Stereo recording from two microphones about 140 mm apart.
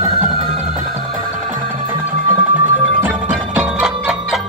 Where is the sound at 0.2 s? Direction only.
55° right (ahead or behind).